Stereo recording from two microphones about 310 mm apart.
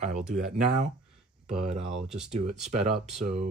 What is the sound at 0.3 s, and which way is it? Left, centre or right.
Speech, right.